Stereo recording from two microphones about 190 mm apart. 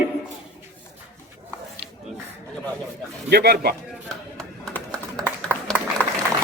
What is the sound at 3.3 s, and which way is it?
Speech, 55° right (ahead or behind).